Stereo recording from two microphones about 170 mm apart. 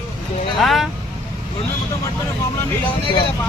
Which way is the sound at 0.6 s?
Centre (ahead or behind).